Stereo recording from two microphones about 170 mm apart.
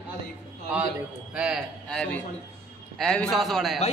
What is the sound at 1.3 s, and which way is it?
A man's voice, 5° right (ahead or behind).